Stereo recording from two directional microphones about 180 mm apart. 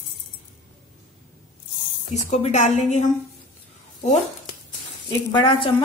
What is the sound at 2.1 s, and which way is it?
Speech, 40° left (ahead or behind).